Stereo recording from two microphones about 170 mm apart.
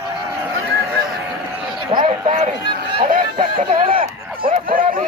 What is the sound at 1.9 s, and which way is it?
Run, 30° right (ahead or behind).